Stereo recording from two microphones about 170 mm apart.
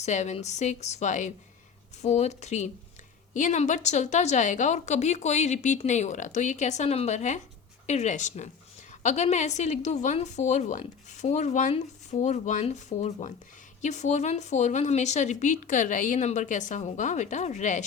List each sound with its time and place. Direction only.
0.0 s a woman's voice: 45° left (ahead or behind)